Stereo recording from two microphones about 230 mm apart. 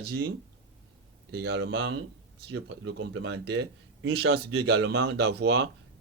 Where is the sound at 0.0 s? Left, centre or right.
Right.